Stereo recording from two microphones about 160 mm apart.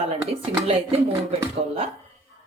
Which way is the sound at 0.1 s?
35° right (ahead or behind).